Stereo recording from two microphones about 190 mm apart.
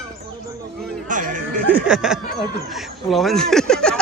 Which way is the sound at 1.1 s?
45° right (ahead or behind).